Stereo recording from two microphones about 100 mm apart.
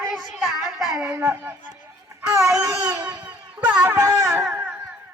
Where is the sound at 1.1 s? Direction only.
20° right (ahead or behind).